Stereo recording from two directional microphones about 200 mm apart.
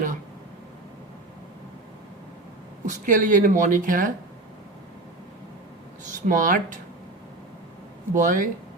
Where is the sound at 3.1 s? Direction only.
40° right (ahead or behind).